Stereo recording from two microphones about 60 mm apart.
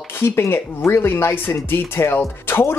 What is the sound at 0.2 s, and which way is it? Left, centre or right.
Speech, left.